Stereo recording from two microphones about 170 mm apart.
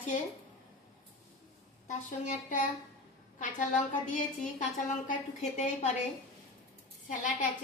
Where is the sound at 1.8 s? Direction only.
50° left (ahead or behind).